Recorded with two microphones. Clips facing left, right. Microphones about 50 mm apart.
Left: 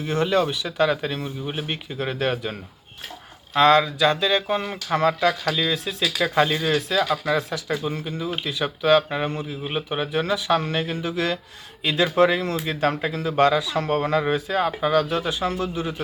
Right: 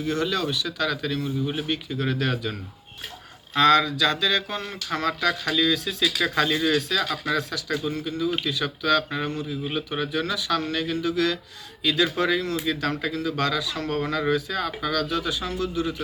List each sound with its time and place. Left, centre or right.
0.0 s speech: left
6.0 s speech: centre; by 16.0 s left